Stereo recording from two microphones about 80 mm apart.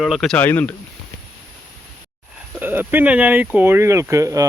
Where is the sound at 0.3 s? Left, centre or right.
Left.